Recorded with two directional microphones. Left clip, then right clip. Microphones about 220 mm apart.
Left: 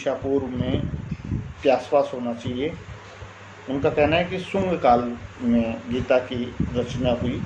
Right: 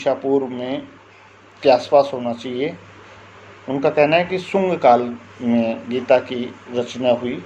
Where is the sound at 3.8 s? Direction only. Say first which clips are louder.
Right 5 dB; 35° right (ahead or behind).